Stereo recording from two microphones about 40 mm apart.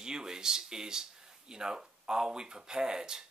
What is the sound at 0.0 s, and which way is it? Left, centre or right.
Speech, centre.